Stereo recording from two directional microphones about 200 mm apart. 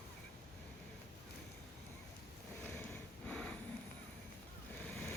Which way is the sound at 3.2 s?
5° left (ahead or behind).